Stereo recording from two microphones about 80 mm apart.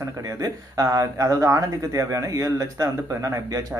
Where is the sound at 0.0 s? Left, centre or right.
Right.